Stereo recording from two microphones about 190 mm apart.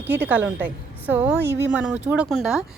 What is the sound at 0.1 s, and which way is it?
A woman's voice, 10° right (ahead or behind).